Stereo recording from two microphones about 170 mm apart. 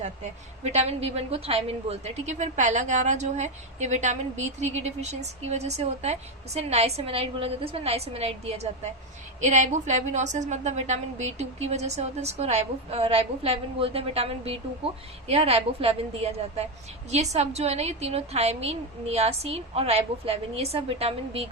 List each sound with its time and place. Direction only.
0.6 s a woman's voice: 40° right (ahead or behind)